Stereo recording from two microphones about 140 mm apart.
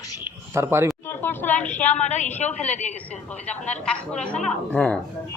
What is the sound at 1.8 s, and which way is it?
Speech, 55° left (ahead or behind).